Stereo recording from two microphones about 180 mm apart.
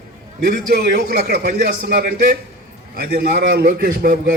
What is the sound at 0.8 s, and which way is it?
A man's voice, 60° right (ahead or behind).